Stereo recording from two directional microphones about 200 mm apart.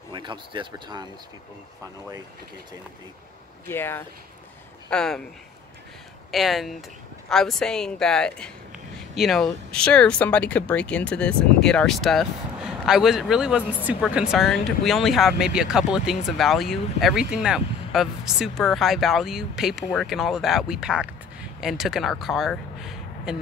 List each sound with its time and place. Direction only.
0.1 s speech: 25° right (ahead or behind)
3.6 s speech: 10° left (ahead or behind)
6.3 s speech: centre (ahead or behind)